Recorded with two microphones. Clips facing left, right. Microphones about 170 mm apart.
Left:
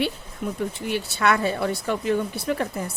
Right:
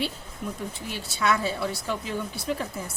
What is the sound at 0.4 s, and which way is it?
Speech, 65° left (ahead or behind).